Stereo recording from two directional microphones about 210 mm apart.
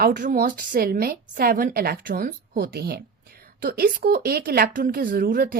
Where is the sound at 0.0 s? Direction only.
40° right (ahead or behind).